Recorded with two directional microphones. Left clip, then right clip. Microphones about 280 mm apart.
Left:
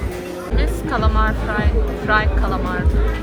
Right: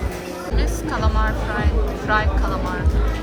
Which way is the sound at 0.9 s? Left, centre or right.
Centre.